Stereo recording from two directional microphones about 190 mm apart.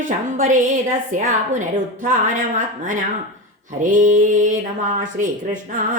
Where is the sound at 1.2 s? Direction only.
40° right (ahead or behind).